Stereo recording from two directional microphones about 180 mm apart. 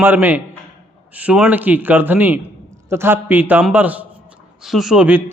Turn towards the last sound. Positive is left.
turn(degrees=-5)  # may be behind; listen again after turning